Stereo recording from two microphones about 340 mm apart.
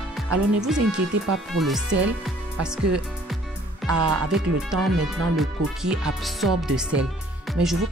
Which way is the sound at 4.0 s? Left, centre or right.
Right.